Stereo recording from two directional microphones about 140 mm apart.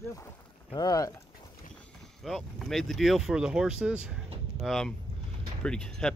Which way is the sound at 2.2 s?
Centre (ahead or behind).